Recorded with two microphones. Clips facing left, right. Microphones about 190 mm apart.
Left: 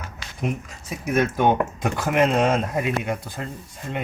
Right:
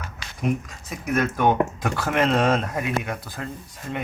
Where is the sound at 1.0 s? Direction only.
20° left (ahead or behind).